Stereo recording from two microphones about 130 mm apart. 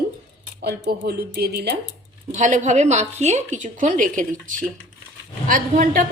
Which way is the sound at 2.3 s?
70° right (ahead or behind).